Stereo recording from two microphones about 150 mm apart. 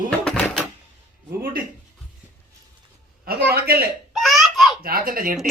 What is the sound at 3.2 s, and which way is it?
Speech, 90° right.